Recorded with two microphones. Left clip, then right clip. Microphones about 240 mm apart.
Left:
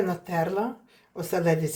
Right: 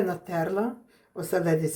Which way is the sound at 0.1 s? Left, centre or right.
Centre.